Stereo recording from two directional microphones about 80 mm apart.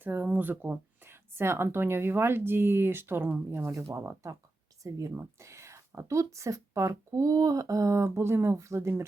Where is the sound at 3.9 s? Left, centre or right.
Right.